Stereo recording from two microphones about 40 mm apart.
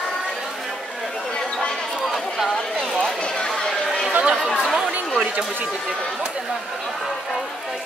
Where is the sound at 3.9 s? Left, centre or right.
Centre.